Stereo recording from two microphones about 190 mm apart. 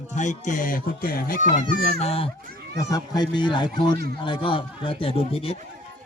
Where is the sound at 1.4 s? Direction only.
45° right (ahead or behind).